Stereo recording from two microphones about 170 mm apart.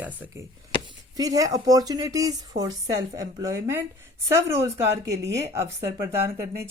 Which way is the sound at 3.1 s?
20° right (ahead or behind).